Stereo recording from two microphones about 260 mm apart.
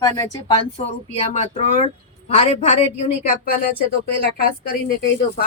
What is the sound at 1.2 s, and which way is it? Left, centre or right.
A woman's voice, left.